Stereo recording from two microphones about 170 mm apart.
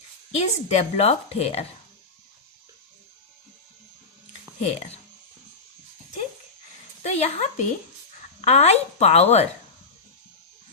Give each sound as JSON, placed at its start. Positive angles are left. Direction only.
{"t": 0.3, "sound": "a woman's voice", "side_deg": 40}
{"t": 4.6, "sound": "a woman's voice", "side_deg": 35}
{"t": 7.0, "sound": "a woman's voice", "side_deg": 40}